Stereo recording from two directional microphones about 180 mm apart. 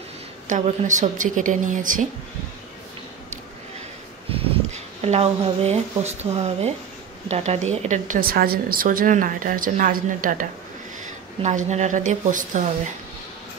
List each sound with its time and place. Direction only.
0.5 s speech: 45° right (ahead or behind)
4.3 s a woman's voice: 35° right (ahead or behind)